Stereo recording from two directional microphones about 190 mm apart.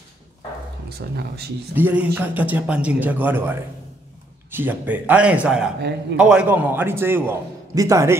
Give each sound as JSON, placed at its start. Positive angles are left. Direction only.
{"t": 0.8, "sound": "speech", "side_deg": -60}
{"t": 1.8, "sound": "a man's voice", "side_deg": -10}